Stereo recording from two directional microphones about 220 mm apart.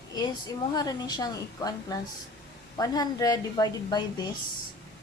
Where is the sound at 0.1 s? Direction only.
20° left (ahead or behind).